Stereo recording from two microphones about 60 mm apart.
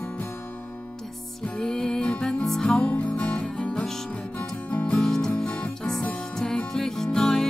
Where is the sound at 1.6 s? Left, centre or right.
Centre.